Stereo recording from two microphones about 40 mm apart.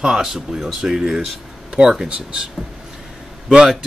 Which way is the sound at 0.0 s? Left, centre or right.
Centre.